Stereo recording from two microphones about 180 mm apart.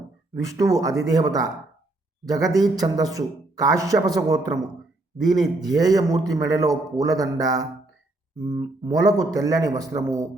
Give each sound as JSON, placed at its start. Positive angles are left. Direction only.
{"t": 0.4, "sound": "a man's voice", "side_deg": -20}